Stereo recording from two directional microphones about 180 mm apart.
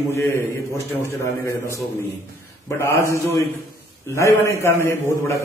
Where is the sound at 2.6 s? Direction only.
15° left (ahead or behind).